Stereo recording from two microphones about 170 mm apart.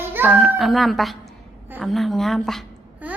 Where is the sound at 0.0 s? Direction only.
10° right (ahead or behind).